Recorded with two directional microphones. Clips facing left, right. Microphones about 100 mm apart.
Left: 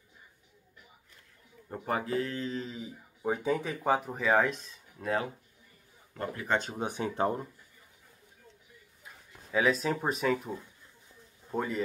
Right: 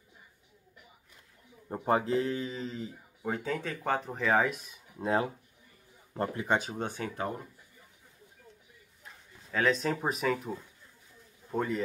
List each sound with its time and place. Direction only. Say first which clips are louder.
1.7 s speech: right 4 dB; 25° right (ahead or behind)
2.5 s speech: even; centre (ahead or behind)
3.3 s speech: left 3 dB; 15° left (ahead or behind); by 5.0 s 10° right (ahead or behind)
5.0 s speech: right 3 dB; 25° right (ahead or behind)
6.8 s speech: left 2 dB; 15° left (ahead or behind)
9.0 s speech: even; 5° left (ahead or behind)